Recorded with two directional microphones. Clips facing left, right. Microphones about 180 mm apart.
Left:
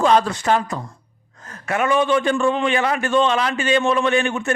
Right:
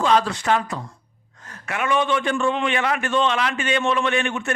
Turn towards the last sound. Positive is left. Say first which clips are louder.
# left 4 dB
turn(degrees=35)  # may be behind; listen again after turning